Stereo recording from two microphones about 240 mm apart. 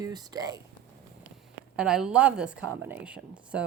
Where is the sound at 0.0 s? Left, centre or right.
Centre.